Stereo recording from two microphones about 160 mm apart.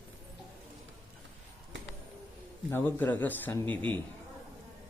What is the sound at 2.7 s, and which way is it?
Speech, 10° left (ahead or behind).